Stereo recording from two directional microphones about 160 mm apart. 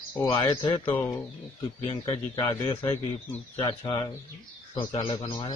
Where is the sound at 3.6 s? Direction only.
35° left (ahead or behind).